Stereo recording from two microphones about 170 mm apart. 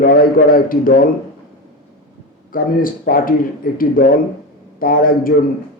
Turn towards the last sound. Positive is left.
turn(degrees=55)  # may be behind; listen again after turning